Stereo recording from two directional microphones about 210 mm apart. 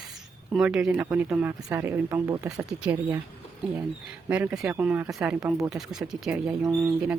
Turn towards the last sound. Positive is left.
turn(degrees=-10)  # may be behind; listen again after turning